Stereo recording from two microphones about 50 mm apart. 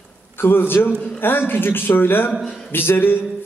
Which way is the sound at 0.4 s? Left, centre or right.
Left.